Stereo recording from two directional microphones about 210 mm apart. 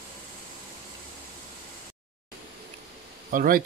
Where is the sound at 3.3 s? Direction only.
40° right (ahead or behind).